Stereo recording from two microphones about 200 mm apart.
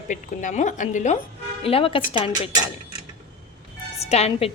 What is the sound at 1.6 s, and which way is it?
Speech, 30° left (ahead or behind).